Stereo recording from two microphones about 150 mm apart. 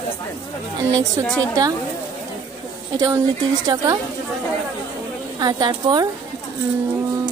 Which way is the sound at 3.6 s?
20° right (ahead or behind).